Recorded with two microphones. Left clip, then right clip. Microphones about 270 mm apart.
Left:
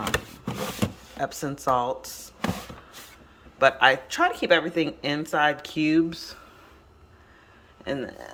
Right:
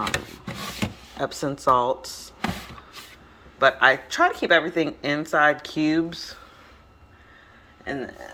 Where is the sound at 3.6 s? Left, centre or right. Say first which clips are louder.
Right 1 dB; centre.